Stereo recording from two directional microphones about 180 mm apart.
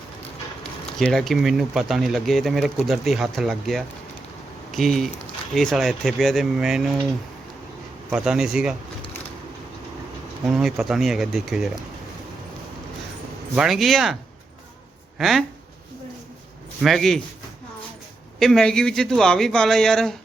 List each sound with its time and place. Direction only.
0.9 s speech: centre (ahead or behind)
8.1 s speech: 5° right (ahead or behind)
10.4 s speech: centre (ahead or behind)
13.6 s speech: centre (ahead or behind)
15.2 s speech: centre (ahead or behind)
16.8 s speech: centre (ahead or behind)
18.3 s speech: 5° left (ahead or behind)